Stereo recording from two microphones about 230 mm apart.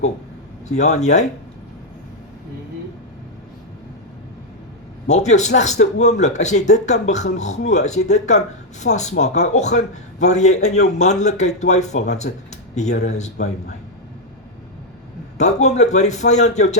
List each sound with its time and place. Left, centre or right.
0.7 s speech: left
5.0 s speech: left
15.4 s speech: left